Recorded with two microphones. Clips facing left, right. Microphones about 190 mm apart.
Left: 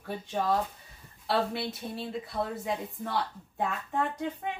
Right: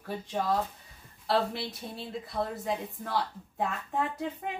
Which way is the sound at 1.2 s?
Centre (ahead or behind).